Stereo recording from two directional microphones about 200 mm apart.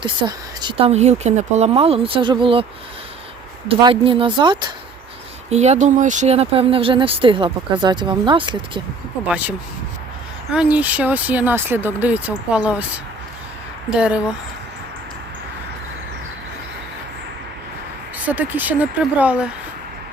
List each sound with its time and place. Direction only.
0.0 s speech: 20° right (ahead or behind)
3.7 s speech: 25° right (ahead or behind)
5.5 s speech: 35° right (ahead or behind)
9.2 s speech: 5° right (ahead or behind)
13.9 s speech: 5° right (ahead or behind)
18.3 s speech: 10° right (ahead or behind)